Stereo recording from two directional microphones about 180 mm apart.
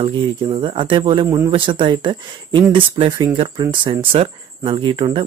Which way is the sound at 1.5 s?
25° right (ahead or behind).